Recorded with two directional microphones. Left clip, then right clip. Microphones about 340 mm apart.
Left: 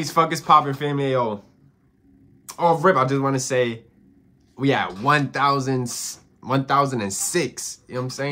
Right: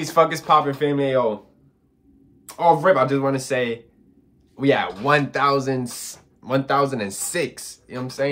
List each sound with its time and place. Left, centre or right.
0.0 s speech: centre
2.4 s speech: centre